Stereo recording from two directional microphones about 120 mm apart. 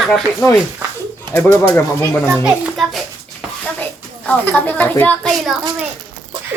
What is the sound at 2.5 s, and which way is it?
Speech, centre (ahead or behind).